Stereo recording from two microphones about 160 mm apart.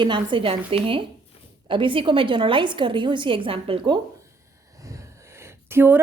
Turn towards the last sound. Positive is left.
turn(degrees=-15)  # may be behind; listen again after turning